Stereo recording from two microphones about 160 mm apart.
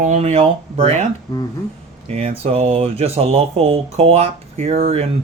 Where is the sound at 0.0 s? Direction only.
45° right (ahead or behind).